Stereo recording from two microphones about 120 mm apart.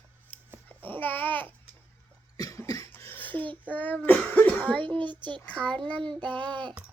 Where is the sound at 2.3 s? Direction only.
30° left (ahead or behind).